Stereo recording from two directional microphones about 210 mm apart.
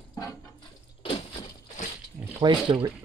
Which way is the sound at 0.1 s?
15° left (ahead or behind).